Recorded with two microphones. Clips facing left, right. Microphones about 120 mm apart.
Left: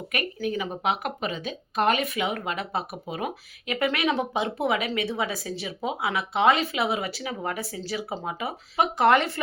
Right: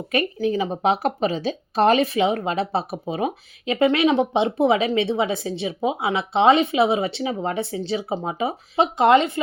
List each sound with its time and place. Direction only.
0.1 s speech: 30° right (ahead or behind)